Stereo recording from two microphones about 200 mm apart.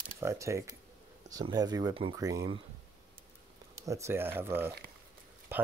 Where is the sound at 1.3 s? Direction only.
20° right (ahead or behind).